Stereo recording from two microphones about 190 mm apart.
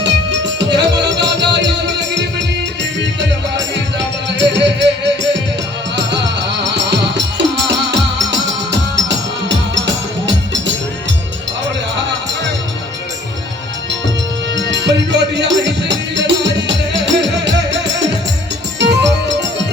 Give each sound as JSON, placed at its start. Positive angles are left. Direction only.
{"t": 0.0, "sound": "music", "side_deg": -65}
{"t": 3.9, "sound": "music", "side_deg": -65}
{"t": 14.5, "sound": "music", "side_deg": -70}